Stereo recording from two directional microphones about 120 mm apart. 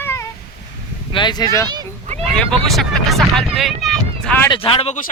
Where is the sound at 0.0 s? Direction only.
20° left (ahead or behind).